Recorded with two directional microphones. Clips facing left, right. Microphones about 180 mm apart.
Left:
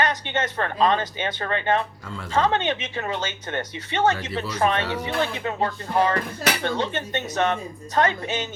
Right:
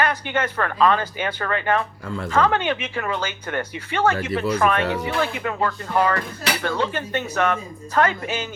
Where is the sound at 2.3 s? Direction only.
25° left (ahead or behind).